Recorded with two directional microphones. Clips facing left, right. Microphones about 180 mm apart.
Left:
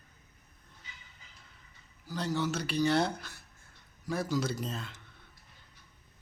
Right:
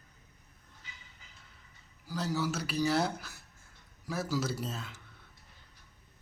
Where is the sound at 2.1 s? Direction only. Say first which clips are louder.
Left 1 dB; 5° right (ahead or behind).